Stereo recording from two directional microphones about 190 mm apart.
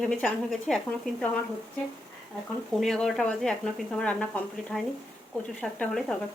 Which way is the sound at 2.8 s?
Centre (ahead or behind).